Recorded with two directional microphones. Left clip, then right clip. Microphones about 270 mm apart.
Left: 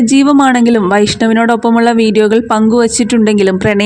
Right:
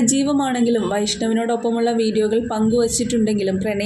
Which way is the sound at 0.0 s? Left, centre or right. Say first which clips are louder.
Left 11 dB; left.